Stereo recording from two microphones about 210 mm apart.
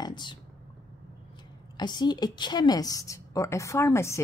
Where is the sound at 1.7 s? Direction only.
20° left (ahead or behind).